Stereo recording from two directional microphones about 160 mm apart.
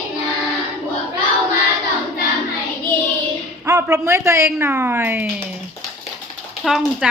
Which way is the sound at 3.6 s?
20° right (ahead or behind).